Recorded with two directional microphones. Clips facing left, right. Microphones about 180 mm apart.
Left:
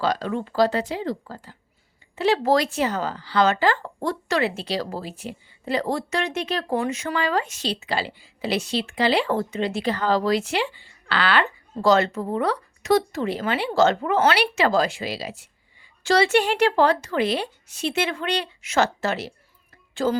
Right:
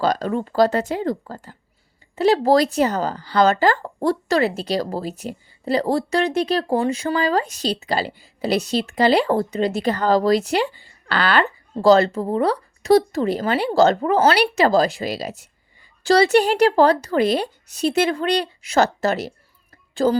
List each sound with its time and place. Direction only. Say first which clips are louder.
0.0 s speech: right 4 dB; 45° right (ahead or behind)